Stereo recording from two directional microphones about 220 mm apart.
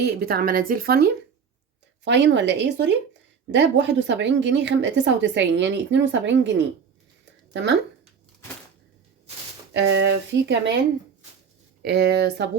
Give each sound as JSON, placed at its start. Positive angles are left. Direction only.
{"t": 0.0, "sound": "a woman's voice", "side_deg": -45}
{"t": 7.5, "sound": "speech", "side_deg": -55}
{"t": 9.7, "sound": "a woman's voice", "side_deg": -50}
{"t": 11.8, "sound": "a woman's voice", "side_deg": -50}